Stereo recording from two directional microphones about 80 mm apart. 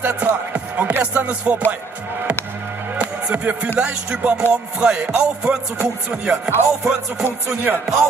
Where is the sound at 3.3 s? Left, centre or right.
Centre.